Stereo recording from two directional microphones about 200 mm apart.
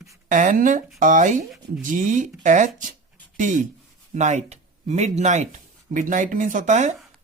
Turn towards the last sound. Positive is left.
turn(degrees=-35)  # may be behind; listen again after turning